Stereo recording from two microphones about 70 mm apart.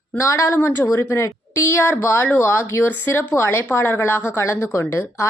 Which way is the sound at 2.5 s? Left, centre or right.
Left.